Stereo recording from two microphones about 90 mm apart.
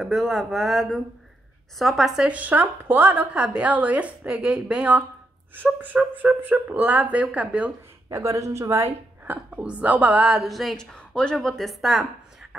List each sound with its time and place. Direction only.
0.0 s a woman's voice: centre (ahead or behind)
8.1 s a woman's voice: 35° right (ahead or behind)
9.2 s a woman's voice: 15° right (ahead or behind); by 10.9 s centre (ahead or behind)
11.0 s speech: 10° left (ahead or behind)